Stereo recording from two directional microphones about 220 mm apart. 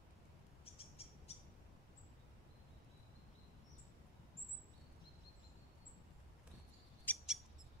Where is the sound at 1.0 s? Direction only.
25° left (ahead or behind).